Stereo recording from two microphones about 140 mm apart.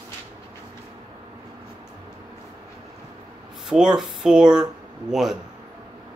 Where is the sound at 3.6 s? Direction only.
5° right (ahead or behind).